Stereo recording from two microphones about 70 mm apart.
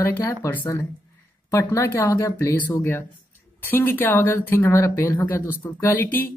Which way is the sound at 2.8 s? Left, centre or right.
Left.